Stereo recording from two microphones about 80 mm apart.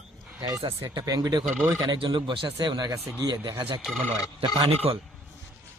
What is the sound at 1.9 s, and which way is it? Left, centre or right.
Speech, right.